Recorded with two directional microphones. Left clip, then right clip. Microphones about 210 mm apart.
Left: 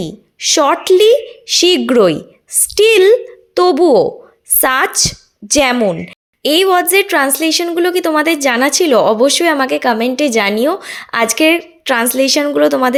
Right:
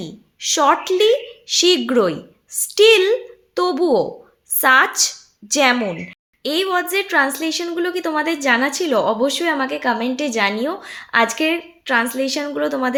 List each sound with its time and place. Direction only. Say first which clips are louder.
0.0 s a woman's voice: left 8 dB; 30° left (ahead or behind)